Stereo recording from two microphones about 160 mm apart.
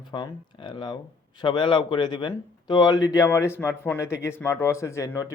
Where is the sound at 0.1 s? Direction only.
30° left (ahead or behind).